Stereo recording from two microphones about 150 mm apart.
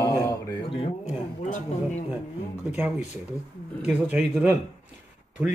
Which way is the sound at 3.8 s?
10° right (ahead or behind).